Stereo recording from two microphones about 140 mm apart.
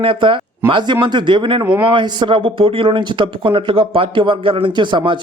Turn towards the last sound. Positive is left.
turn(degrees=-35)  # may be behind; listen again after turning